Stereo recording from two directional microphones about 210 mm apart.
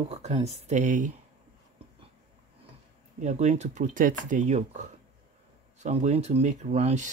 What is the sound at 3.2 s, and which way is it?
Speech, 30° right (ahead or behind).